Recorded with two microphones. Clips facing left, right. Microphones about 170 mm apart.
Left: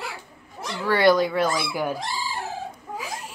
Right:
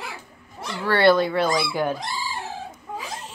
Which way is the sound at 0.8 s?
15° left (ahead or behind).